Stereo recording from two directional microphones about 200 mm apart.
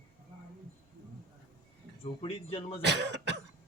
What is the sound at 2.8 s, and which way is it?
Cough, 60° right (ahead or behind).